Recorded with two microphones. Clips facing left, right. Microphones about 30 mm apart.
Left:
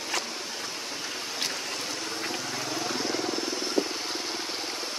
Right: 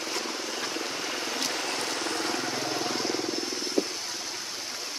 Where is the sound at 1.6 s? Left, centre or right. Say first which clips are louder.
Right 3 dB; right.